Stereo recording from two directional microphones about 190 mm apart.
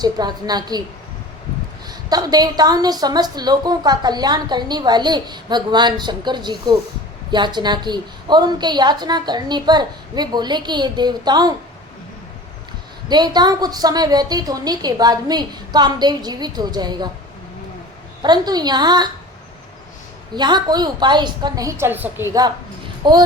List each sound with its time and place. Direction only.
0.0 s a woman's voice: 20° right (ahead or behind)
1.9 s a woman's voice: 20° right (ahead or behind)
13.1 s a woman's voice: 20° right (ahead or behind)
18.2 s a woman's voice: 20° right (ahead or behind)
20.3 s a woman's voice: 20° right (ahead or behind)